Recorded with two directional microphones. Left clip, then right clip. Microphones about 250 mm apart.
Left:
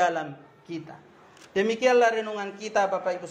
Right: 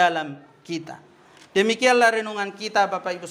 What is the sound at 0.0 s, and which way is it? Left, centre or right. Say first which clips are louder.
A man's voice: right 5 dB; right.